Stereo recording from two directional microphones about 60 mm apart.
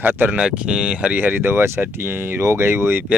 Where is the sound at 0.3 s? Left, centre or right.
Centre; by 3.0 s right.